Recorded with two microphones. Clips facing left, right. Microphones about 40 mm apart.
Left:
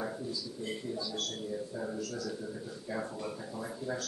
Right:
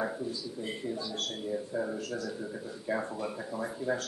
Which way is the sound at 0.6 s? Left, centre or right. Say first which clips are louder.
Right 1 dB; right.